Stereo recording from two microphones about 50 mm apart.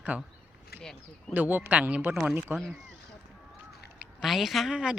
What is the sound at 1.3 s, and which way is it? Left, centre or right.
Speech, right.